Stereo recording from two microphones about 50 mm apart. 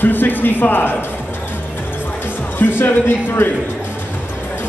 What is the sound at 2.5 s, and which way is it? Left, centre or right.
Music, left.